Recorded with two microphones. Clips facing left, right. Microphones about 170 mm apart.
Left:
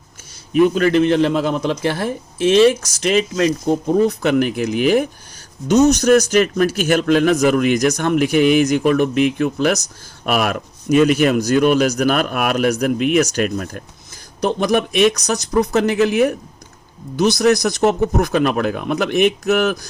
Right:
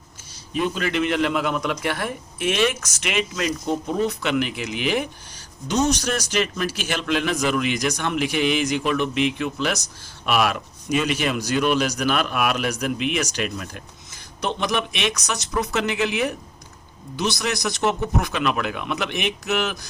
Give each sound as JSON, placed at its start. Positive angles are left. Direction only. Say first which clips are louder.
{"t": 0.5, "sound": "a man's voice", "louder": "left 10 dB", "side_deg": 45}